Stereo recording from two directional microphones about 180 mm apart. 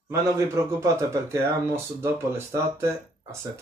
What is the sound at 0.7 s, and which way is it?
Speech, 15° right (ahead or behind).